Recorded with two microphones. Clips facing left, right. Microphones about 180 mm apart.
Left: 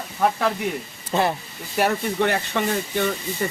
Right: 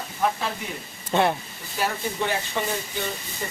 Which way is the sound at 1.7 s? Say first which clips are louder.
Left 6 dB; 65° left (ahead or behind).